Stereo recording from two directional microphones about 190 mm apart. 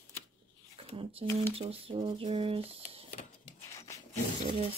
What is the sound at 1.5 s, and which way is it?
Speech, 30° right (ahead or behind).